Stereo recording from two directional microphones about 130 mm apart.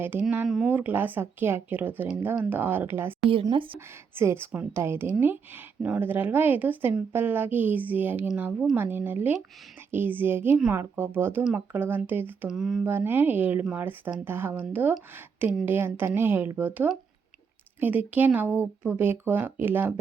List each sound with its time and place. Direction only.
0.0 s speech: 15° right (ahead or behind)
3.5 s speech: 45° right (ahead or behind)
4.1 s a woman's voice: 20° right (ahead or behind)
12.5 s speech: 5° right (ahead or behind)
12.8 s speech: 15° right (ahead or behind)